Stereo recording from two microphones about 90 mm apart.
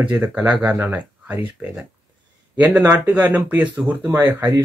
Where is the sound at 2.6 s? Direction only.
20° right (ahead or behind).